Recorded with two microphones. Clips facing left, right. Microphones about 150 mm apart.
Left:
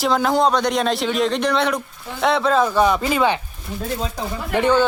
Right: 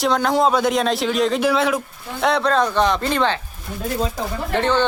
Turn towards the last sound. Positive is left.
turn(degrees=10)  # may be behind; listen again after turning